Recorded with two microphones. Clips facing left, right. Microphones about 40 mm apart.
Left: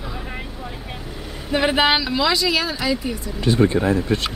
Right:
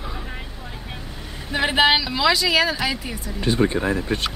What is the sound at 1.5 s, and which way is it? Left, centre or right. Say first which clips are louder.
Speech: even; centre.